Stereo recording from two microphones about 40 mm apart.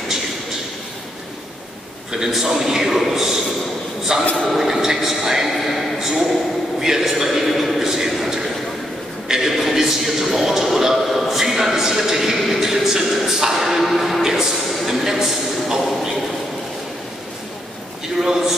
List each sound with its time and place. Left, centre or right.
2.1 s a man's voice: centre
4.5 s a man's voice: centre
7.8 s a sound: centre
9.3 s a man's voice: centre
14.2 s a man's voice: centre